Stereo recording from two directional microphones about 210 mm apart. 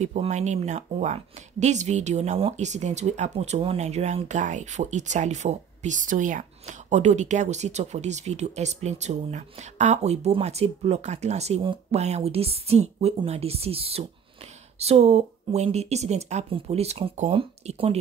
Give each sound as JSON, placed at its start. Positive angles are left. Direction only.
{"t": 0.0, "sound": "speech", "side_deg": -35}